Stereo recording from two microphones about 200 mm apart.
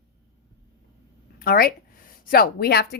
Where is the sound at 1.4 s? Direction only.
50° left (ahead or behind).